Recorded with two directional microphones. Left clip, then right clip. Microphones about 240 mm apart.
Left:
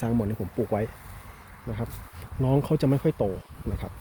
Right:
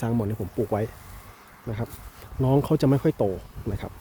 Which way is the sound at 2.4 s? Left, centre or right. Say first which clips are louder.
Right 3 dB; centre.